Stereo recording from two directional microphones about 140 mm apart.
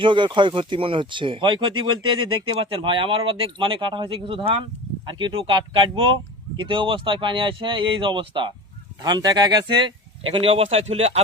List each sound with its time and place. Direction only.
0.0 s speech: 35° right (ahead or behind)